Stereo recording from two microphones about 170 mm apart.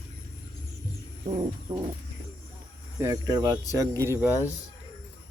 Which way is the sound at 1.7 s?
20° right (ahead or behind).